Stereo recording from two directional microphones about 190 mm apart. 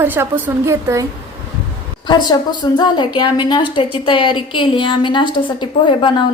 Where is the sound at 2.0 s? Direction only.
20° left (ahead or behind).